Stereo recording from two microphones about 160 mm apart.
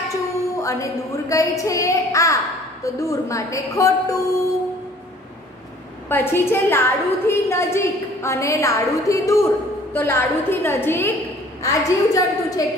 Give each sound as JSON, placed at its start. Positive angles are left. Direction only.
{"t": 0.1, "sound": "a sound", "side_deg": 20}
{"t": 1.6, "sound": "a child's voice", "side_deg": 20}
{"t": 6.0, "sound": "a woman's voice", "side_deg": 15}